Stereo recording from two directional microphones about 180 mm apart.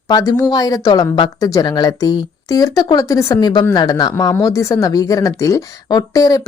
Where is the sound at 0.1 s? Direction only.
20° left (ahead or behind).